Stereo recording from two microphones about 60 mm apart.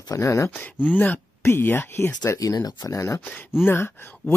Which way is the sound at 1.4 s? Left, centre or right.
Left.